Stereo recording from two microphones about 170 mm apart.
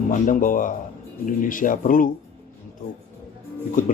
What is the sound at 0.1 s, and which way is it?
Speech, 50° left (ahead or behind).